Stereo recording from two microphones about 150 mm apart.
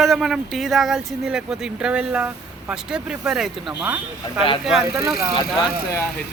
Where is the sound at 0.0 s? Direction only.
Centre (ahead or behind).